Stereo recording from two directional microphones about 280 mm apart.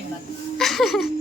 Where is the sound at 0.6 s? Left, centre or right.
Centre.